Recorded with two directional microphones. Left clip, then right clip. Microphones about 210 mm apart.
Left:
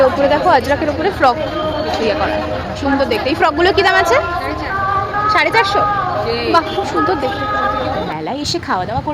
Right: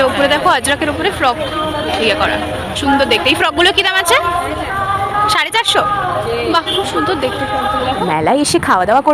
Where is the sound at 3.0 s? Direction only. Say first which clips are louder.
Right 1 dB; 5° left (ahead or behind).